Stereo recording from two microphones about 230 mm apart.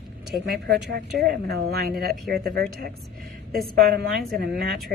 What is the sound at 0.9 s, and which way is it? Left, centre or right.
A woman's voice, right.